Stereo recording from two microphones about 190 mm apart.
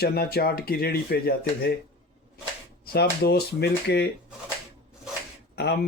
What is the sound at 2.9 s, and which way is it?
Speech, 55° left (ahead or behind).